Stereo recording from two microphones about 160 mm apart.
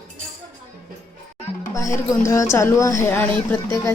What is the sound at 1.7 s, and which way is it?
Speech, 20° left (ahead or behind).